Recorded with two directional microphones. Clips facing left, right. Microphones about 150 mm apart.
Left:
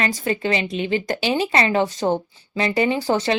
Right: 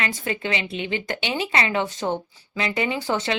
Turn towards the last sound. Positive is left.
turn(degrees=35)  # may be behind; listen again after turning